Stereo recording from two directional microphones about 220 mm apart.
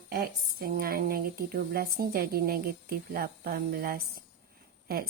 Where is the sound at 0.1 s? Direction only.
45° right (ahead or behind).